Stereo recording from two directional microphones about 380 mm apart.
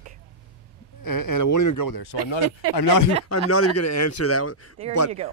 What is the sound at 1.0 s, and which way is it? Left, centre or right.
Speech, left.